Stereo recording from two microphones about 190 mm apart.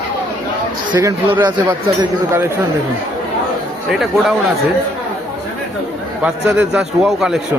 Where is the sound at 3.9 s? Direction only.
Centre (ahead or behind).